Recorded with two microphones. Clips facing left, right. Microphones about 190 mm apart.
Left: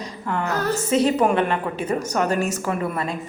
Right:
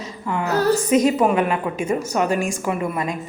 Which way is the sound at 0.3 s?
5° right (ahead or behind).